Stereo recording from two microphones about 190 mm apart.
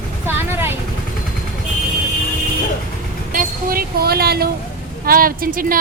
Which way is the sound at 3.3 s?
45° right (ahead or behind).